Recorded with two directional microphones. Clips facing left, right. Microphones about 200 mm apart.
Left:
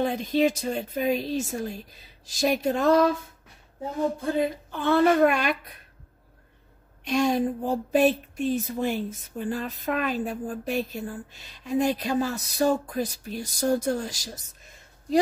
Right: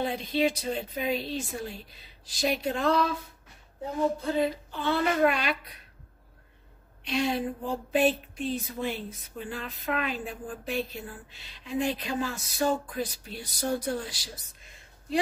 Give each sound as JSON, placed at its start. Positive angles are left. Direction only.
{"t": 0.0, "sound": "speech", "side_deg": 45}
{"t": 4.2, "sound": "speech", "side_deg": 50}
{"t": 7.1, "sound": "speech", "side_deg": 45}